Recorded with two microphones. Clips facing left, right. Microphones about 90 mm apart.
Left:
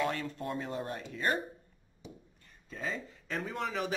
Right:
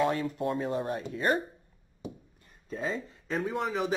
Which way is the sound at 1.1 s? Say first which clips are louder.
Right 4 dB; 20° right (ahead or behind).